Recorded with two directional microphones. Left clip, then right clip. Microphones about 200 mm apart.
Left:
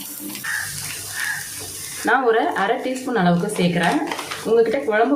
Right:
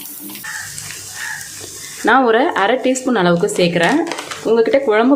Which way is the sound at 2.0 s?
50° right (ahead or behind).